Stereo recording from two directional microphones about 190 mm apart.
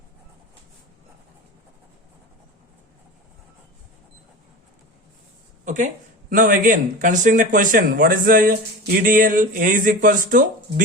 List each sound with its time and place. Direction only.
5.6 s speech: 40° right (ahead or behind)